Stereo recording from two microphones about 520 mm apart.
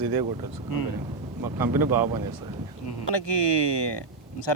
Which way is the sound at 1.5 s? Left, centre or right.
Right.